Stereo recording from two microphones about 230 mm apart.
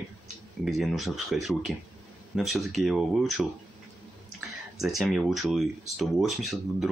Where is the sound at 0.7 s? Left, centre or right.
Centre.